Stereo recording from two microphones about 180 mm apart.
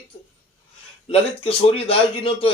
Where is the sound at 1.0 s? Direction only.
30° left (ahead or behind).